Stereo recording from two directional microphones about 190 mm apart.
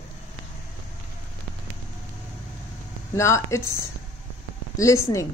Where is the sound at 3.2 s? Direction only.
15° left (ahead or behind).